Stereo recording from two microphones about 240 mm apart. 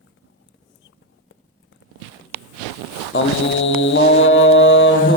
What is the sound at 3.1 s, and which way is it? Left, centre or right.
Foghorn, left.